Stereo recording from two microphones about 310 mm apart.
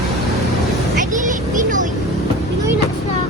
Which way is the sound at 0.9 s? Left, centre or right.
Right.